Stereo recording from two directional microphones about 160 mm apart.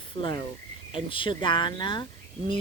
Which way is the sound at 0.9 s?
30° left (ahead or behind).